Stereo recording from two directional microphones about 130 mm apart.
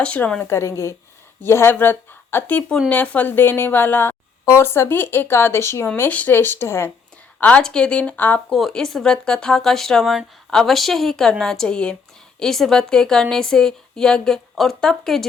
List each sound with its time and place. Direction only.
0.0 s a woman's voice: 10° left (ahead or behind)